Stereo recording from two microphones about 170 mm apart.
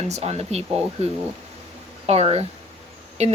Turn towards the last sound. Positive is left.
turn(degrees=-40)  # may be behind; listen again after turning